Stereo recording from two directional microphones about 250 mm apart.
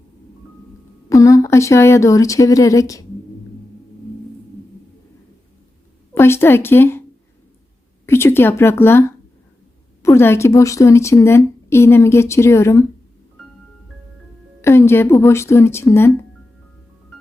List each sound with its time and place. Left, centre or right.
1.1 s speech: centre
6.1 s speech: centre
8.0 s speech: centre
14.6 s speech: centre